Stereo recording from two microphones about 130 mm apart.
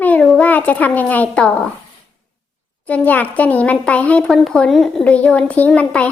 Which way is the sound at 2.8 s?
10° left (ahead or behind).